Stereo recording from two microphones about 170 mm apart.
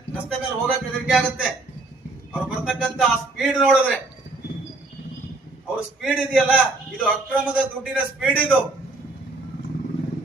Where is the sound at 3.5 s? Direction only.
Centre (ahead or behind).